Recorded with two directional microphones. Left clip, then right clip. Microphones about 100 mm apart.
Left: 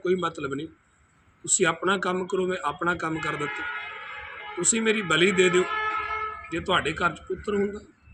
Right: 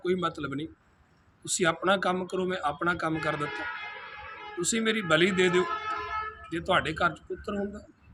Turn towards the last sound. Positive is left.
turn(degrees=-35)  # may be behind; listen again after turning